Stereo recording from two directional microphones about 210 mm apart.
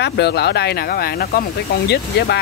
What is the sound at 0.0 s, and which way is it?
Speech, 50° left (ahead or behind).